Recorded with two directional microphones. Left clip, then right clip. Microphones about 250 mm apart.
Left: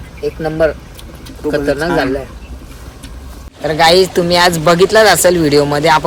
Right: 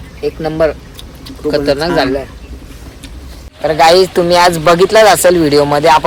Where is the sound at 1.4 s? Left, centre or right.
Centre.